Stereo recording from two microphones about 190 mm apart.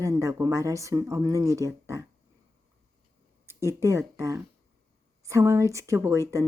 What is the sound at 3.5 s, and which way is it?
A woman's voice, 15° right (ahead or behind).